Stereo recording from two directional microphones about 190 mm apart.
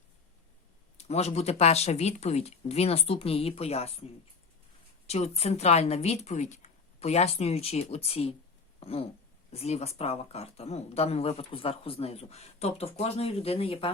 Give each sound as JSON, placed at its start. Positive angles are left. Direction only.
{"t": 0.9, "sound": "speech", "side_deg": 35}
{"t": 5.0, "sound": "speech", "side_deg": 35}